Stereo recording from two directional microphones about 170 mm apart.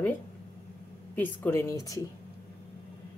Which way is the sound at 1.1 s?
10° left (ahead or behind).